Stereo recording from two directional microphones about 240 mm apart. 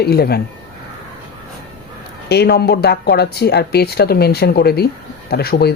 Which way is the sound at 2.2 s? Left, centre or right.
Left.